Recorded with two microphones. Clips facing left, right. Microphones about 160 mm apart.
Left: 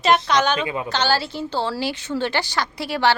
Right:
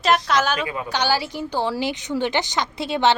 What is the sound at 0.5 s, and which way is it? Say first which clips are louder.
Speech: left 2 dB; 25° left (ahead or behind).